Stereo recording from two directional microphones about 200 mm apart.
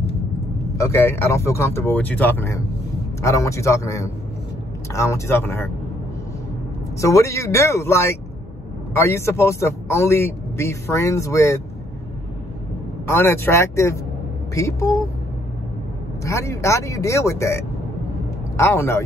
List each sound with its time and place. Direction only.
0.7 s a man's voice: 15° left (ahead or behind)
7.0 s a man's voice: 15° left (ahead or behind)
13.0 s a man's voice: 10° left (ahead or behind)
16.3 s a man's voice: 15° left (ahead or behind)